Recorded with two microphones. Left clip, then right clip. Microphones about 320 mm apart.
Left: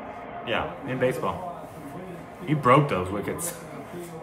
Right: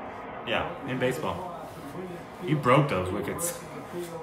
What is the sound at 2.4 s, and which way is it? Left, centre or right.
A man's voice, centre.